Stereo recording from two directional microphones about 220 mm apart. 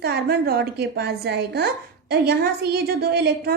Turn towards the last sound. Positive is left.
turn(degrees=-50)  # may be behind; listen again after turning